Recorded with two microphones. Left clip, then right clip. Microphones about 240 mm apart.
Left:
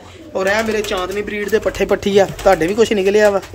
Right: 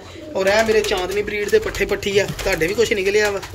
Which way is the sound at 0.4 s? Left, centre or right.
Centre.